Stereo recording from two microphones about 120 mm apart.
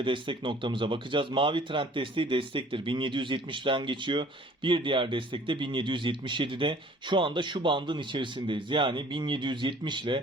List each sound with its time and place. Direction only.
0.0 s speech: 45° right (ahead or behind)